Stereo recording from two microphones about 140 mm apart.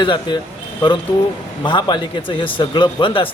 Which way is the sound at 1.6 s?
30° left (ahead or behind).